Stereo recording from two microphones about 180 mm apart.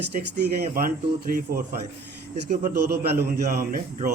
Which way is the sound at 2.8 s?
60° right (ahead or behind).